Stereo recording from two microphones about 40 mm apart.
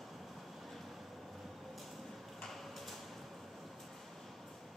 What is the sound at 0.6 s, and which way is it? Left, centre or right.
Vehicle, centre.